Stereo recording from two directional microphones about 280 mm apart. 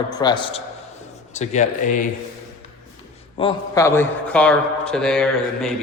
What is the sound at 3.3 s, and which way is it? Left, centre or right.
A man's voice, centre.